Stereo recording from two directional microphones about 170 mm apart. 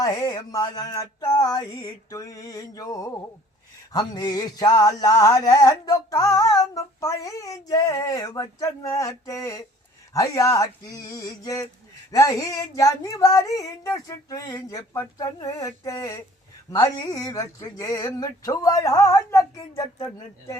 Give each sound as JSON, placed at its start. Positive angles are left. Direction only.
{"t": 0.0, "sound": "music", "side_deg": 20}